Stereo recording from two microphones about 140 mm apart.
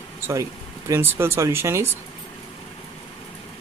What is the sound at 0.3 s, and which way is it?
Speech, 20° right (ahead or behind).